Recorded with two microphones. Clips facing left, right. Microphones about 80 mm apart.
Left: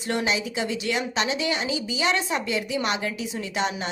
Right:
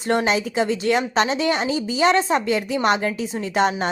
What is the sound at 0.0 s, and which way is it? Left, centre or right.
A woman's voice, right.